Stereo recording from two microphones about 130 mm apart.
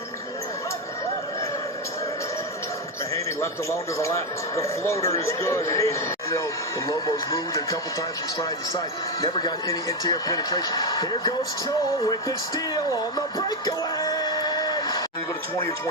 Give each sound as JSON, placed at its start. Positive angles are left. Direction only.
{"t": 3.4, "sound": "a man's voice", "side_deg": 20}
{"t": 9.2, "sound": "a man's voice", "side_deg": 30}
{"t": 13.7, "sound": "a sound", "side_deg": 30}